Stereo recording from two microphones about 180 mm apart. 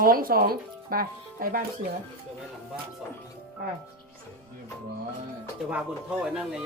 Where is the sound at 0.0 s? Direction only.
55° right (ahead or behind).